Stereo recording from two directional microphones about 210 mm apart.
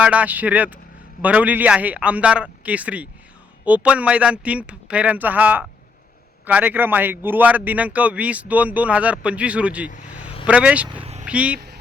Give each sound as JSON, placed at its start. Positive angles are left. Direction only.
{"t": 0.0, "sound": "a man's voice", "side_deg": -5}
{"t": 11.0, "sound": "vehicle", "side_deg": -30}
{"t": 11.3, "sound": "speech", "side_deg": -5}